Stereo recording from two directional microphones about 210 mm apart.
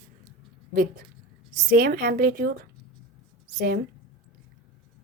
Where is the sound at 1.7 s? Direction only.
40° right (ahead or behind).